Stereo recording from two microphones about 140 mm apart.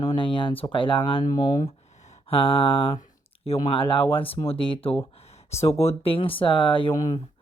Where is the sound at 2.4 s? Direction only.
40° left (ahead or behind).